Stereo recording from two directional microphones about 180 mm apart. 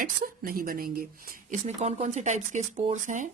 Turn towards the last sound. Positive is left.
turn(degrees=-40)  # may be behind; listen again after turning